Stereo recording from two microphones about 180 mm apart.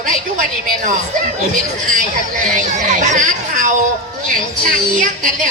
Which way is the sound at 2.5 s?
45° right (ahead or behind).